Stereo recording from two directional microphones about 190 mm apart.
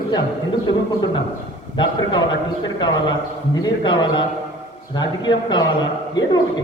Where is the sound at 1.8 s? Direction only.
20° left (ahead or behind).